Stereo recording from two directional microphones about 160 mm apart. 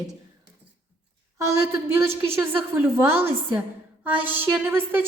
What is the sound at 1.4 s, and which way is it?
A woman's voice, 20° right (ahead or behind).